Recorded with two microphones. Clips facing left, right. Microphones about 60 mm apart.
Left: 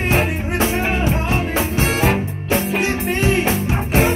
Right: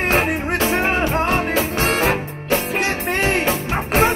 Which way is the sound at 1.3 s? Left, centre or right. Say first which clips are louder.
Right 1 dB; right.